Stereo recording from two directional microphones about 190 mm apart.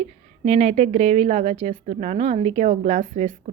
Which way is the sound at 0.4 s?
35° right (ahead or behind).